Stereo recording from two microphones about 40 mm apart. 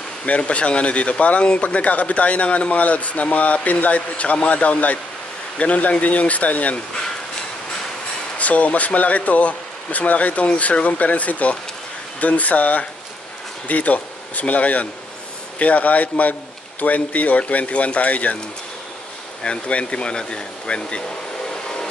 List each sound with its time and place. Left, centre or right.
0.2 s speech: left
8.4 s speech: left
19.4 s speech: left
21.5 s a sound: left